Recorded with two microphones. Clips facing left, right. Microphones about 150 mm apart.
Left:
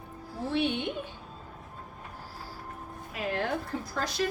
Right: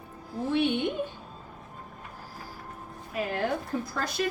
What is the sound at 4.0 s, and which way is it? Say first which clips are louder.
Speech: left 2 dB; 55° right (ahead or behind).